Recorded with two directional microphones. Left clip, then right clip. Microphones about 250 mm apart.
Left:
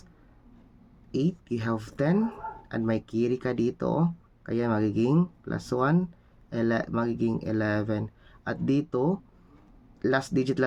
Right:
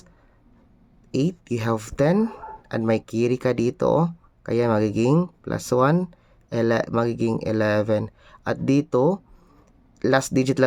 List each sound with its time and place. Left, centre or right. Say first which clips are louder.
1.1 s speech: right 5 dB; right